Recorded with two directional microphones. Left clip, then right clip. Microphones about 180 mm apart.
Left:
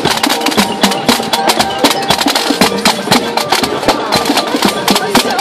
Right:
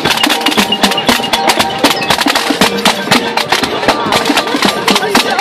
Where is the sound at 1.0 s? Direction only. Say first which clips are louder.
Right 1 dB; 10° left (ahead or behind).